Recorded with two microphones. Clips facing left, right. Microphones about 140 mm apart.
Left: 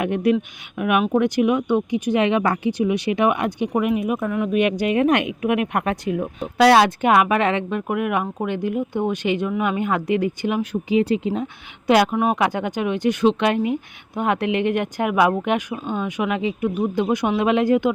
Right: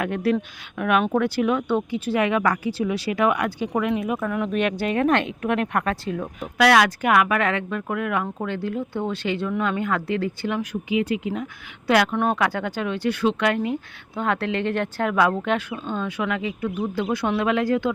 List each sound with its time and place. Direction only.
0.0 s speech: 20° left (ahead or behind)
4.3 s speech: 5° left (ahead or behind)
4.6 s speech: 15° left (ahead or behind)
6.4 s speech: 30° left (ahead or behind)
10.6 s speech: 30° left (ahead or behind)
12.1 s speech: 5° left (ahead or behind)
12.4 s speech: 20° left (ahead or behind)